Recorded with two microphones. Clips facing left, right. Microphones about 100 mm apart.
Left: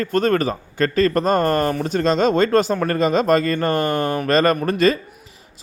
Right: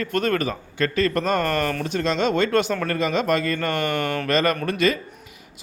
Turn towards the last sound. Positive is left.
turn(degrees=35)  # may be behind; listen again after turning